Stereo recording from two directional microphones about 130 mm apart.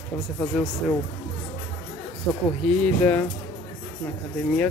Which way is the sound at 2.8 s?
10° left (ahead or behind).